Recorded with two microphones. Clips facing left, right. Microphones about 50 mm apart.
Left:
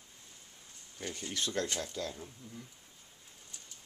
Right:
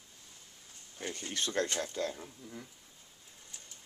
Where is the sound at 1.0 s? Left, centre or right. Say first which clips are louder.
Right 1 dB; right.